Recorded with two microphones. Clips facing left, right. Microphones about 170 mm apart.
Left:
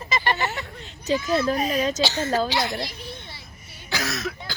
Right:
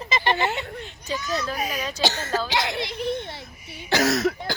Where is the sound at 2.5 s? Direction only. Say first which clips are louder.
Even; 75° right (ahead or behind).